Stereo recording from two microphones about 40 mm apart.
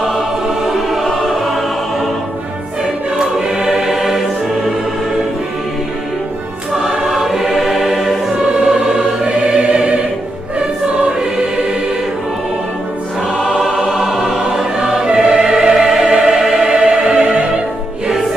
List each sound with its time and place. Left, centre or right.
0.7 s music: centre
3.2 s choir: centre
7.1 s choir: centre
8.5 s music: right
13.5 s music: centre
15.0 s music: right
16.4 s choir: centre
17.1 s music: right